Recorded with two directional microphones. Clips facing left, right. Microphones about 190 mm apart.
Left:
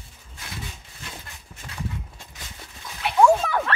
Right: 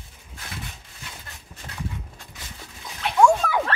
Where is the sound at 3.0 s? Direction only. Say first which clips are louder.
Even; 5° left (ahead or behind).